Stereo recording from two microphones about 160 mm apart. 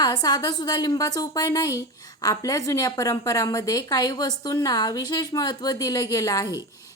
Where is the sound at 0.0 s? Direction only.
25° left (ahead or behind).